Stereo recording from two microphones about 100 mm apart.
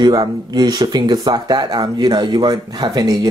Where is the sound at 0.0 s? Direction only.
45° right (ahead or behind).